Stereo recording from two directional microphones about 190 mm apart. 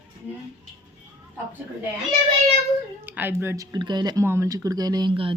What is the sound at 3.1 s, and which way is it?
Speech, 10° right (ahead or behind).